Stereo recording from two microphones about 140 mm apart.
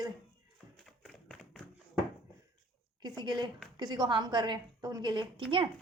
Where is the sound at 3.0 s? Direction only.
30° right (ahead or behind).